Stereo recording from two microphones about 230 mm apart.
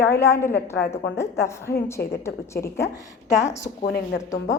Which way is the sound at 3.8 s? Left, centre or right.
Left.